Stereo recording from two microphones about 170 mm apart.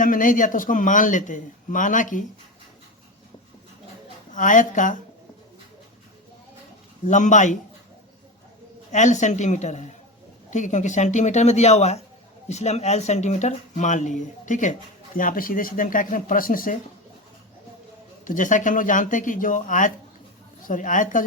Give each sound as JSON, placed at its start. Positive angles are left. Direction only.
{"t": 0.0, "sound": "speech", "side_deg": 50}
{"t": 4.4, "sound": "speech", "side_deg": 50}
{"t": 7.0, "sound": "speech", "side_deg": 45}
{"t": 8.9, "sound": "speech", "side_deg": 45}
{"t": 18.3, "sound": "speech", "side_deg": 50}